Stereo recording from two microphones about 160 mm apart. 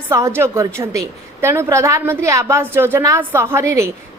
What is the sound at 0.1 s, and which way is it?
A woman's voice, 20° right (ahead or behind).